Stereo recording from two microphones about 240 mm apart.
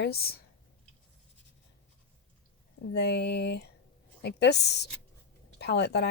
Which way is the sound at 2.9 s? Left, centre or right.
Left.